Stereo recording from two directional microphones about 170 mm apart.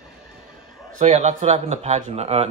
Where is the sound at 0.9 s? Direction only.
45° right (ahead or behind).